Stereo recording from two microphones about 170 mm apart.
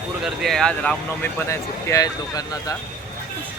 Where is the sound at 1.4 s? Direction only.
20° left (ahead or behind).